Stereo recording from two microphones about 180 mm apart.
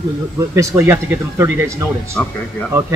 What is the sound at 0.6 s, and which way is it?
Speech, 15° right (ahead or behind).